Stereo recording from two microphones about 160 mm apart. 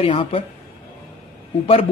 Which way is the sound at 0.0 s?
35° left (ahead or behind).